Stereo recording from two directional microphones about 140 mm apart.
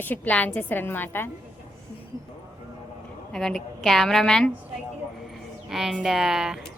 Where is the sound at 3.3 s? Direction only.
Centre (ahead or behind).